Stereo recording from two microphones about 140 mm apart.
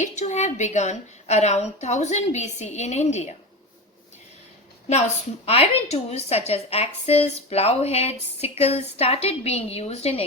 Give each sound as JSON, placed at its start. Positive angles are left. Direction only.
{"t": 0.0, "sound": "a woman's voice", "side_deg": 55}
{"t": 4.9, "sound": "a woman's voice", "side_deg": 50}